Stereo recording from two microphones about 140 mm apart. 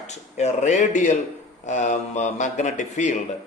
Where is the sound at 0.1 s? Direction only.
55° left (ahead or behind).